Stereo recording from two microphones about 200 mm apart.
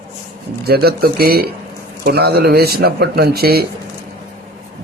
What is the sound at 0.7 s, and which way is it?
Speech, 50° right (ahead or behind).